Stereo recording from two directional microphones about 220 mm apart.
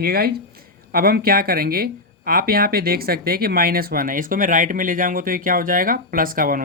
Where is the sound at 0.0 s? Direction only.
45° right (ahead or behind).